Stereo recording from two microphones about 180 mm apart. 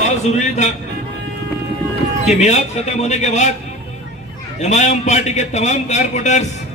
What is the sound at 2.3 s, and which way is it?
A man's voice, 40° left (ahead or behind).